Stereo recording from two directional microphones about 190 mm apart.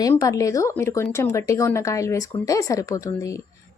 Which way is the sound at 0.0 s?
15° left (ahead or behind).